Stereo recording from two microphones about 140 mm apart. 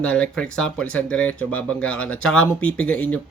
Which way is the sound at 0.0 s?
5° left (ahead or behind).